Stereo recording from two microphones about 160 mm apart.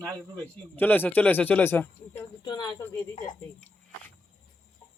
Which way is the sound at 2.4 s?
25° left (ahead or behind).